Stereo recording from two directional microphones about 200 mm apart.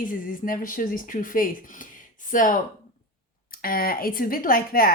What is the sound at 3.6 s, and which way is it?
A woman's voice, 45° left (ahead or behind).